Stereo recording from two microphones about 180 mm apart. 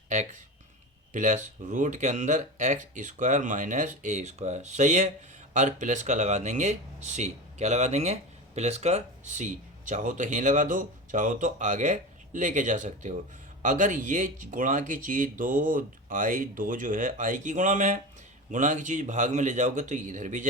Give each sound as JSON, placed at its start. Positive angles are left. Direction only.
{"t": 1.1, "sound": "speech", "side_deg": -45}